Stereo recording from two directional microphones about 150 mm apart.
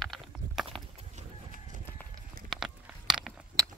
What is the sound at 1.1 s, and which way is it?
Livestock, 60° right (ahead or behind).